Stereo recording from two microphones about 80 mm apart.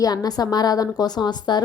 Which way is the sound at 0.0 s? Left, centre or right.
Left.